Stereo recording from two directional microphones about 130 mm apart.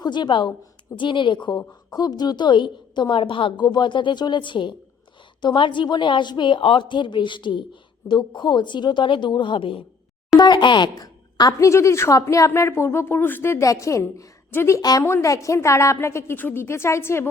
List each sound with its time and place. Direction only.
0.0 s a woman's voice: 35° left (ahead or behind); by 14.8 s 20° left (ahead or behind)
14.8 s a woman's voice: 30° left (ahead or behind)